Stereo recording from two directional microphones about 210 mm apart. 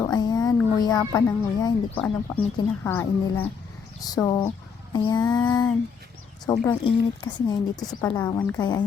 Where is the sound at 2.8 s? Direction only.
10° left (ahead or behind).